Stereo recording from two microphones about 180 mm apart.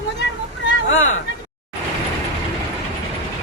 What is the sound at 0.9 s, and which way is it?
Speech, 90° left.